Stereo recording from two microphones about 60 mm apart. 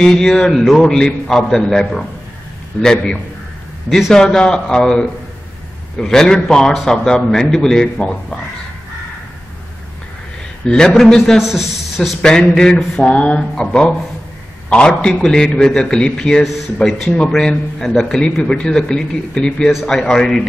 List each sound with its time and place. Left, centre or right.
0.0 s a man's voice: centre
10.7 s a man's voice: centre
12.2 s a man's voice: centre
14.7 s a man's voice: centre